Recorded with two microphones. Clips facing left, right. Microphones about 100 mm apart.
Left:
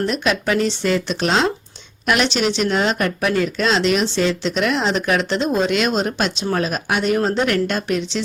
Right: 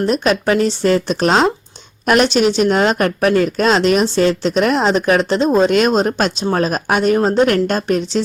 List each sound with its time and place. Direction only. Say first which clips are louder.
0.0 s a woman's voice: right 5 dB; 40° right (ahead or behind)